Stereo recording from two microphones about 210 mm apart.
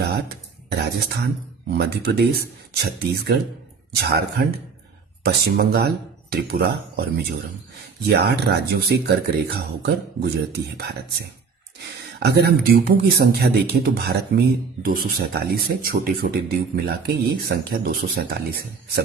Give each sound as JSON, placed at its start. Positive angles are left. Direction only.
{"t": 0.7, "sound": "speech", "side_deg": -50}
{"t": 12.2, "sound": "speech", "side_deg": -50}